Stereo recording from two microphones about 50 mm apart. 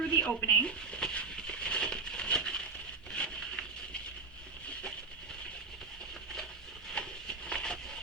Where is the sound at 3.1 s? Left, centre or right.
Centre.